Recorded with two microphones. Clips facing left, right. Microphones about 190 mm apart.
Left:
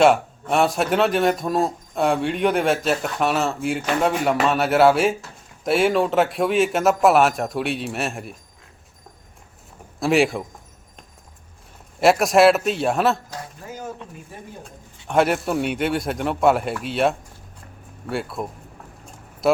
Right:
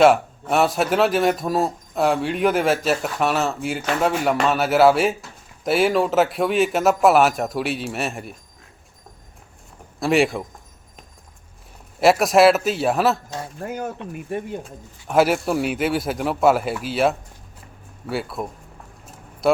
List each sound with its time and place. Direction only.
0.0 s speech: centre (ahead or behind)
10.0 s speech: centre (ahead or behind)
11.9 s speech: centre (ahead or behind)
13.6 s speech: 60° right (ahead or behind)
15.0 s speech: 5° right (ahead or behind)